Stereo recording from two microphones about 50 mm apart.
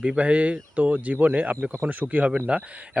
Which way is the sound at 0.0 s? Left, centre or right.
Right.